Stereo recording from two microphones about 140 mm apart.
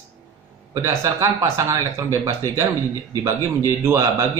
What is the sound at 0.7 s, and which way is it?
A man's voice, 20° right (ahead or behind).